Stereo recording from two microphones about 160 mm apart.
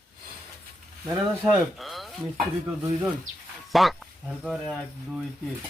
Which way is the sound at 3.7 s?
Centre (ahead or behind).